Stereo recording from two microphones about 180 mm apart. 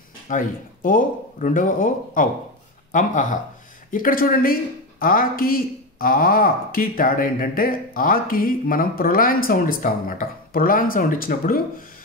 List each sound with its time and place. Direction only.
0.3 s speech: 45° left (ahead or behind)